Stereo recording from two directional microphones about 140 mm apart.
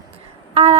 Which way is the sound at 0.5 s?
45° right (ahead or behind).